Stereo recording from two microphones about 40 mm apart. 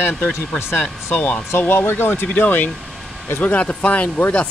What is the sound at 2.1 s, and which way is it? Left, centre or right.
Speech, left.